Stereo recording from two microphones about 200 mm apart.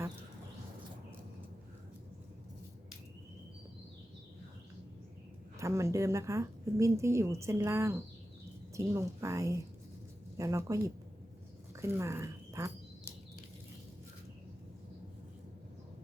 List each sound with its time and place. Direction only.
5.5 s a woman's voice: 15° right (ahead or behind)